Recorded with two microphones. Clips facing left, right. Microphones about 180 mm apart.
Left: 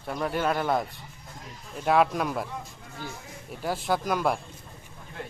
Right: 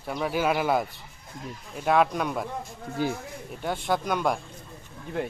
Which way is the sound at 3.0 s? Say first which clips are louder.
Right 12 dB; 75° right (ahead or behind).